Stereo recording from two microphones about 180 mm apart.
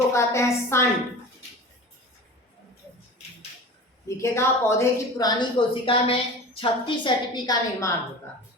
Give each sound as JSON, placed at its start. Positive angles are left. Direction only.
{"t": 0.1, "sound": "a woman's voice", "side_deg": 15}
{"t": 4.2, "sound": "a woman's voice", "side_deg": 15}